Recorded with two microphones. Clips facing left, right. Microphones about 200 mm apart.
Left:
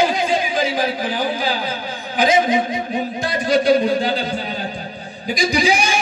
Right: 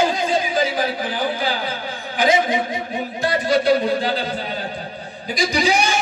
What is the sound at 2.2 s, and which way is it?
A man's voice, 20° left (ahead or behind).